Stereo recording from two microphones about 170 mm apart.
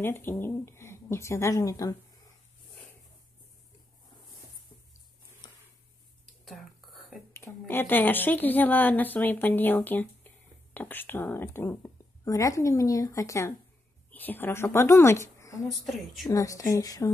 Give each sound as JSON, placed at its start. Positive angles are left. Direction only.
{"t": 0.0, "sound": "a woman's voice", "side_deg": 15}
{"t": 6.4, "sound": "whispering", "side_deg": 0}
{"t": 7.3, "sound": "a woman's voice", "side_deg": 15}